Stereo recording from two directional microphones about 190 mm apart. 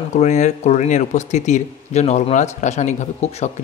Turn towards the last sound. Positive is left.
turn(degrees=35)  # may be behind; listen again after turning